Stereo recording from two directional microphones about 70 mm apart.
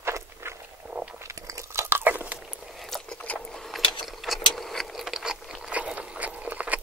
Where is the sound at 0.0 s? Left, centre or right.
Right.